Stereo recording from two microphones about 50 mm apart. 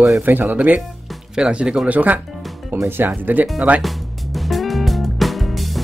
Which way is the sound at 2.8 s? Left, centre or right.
Right.